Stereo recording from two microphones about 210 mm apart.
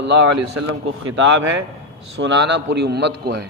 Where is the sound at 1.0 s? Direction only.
65° right (ahead or behind).